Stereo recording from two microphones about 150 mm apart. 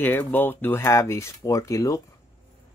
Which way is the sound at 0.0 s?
15° left (ahead or behind).